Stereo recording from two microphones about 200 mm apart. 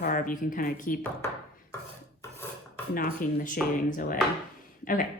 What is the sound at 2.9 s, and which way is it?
A woman's voice, 45° left (ahead or behind).